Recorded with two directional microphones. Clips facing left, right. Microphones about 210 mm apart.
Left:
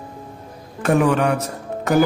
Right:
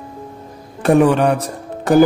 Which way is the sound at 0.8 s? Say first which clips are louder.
Right 4 dB; 35° right (ahead or behind).